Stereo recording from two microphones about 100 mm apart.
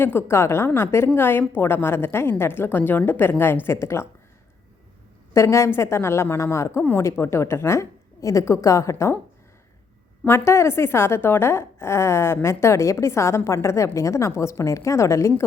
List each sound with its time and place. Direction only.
0.0 s a woman's voice: 25° left (ahead or behind)
5.3 s a woman's voice: 30° left (ahead or behind)
10.2 s a woman's voice: 25° left (ahead or behind)